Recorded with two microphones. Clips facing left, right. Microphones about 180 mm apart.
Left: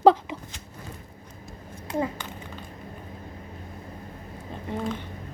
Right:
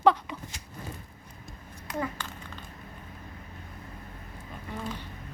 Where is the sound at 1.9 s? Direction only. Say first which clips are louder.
Left 5 dB; 20° left (ahead or behind).